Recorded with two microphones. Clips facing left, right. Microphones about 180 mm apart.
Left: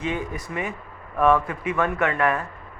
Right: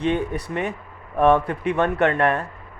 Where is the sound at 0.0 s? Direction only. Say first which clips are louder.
Right 5 dB; 70° right (ahead or behind).